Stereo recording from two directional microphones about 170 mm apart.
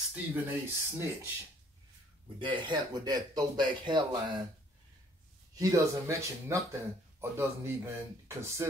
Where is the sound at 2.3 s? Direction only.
30° right (ahead or behind).